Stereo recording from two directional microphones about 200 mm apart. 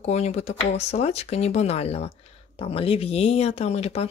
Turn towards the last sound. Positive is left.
turn(degrees=30)  # may be behind; listen again after turning